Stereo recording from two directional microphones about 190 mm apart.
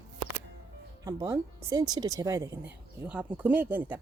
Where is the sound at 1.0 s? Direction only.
20° right (ahead or behind).